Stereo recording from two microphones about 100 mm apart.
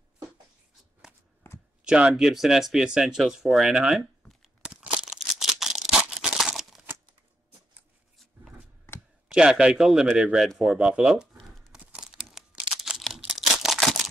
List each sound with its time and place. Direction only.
1.5 s a sound: 20° left (ahead or behind)
1.9 s speech: 10° right (ahead or behind)
4.6 s crumpling: 5° right (ahead or behind)
9.3 s speech: 10° right (ahead or behind)
11.3 s tearing: 5° left (ahead or behind)
11.7 s a sound: 5° right (ahead or behind)
13.6 s single-lens reflex camera: centre (ahead or behind)